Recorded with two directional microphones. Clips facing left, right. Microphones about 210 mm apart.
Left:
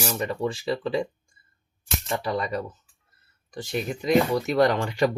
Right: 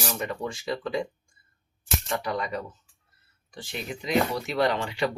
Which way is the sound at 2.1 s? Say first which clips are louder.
Left 3 dB; 30° left (ahead or behind).